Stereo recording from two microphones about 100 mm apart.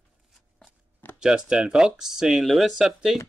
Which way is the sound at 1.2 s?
5° right (ahead or behind).